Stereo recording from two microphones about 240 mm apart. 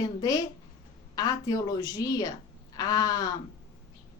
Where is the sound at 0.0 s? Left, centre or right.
Centre.